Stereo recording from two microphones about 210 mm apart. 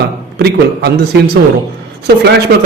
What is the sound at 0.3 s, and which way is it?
A man's voice, 50° right (ahead or behind).